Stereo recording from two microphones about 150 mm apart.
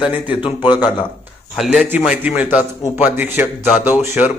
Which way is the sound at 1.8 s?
10° right (ahead or behind).